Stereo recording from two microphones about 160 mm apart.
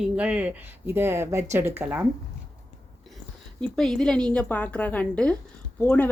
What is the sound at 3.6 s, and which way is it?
A woman's voice, 5° left (ahead or behind).